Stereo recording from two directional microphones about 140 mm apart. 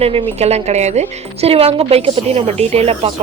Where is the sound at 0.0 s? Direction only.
50° right (ahead or behind).